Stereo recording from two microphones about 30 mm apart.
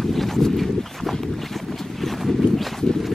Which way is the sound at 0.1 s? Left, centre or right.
Centre.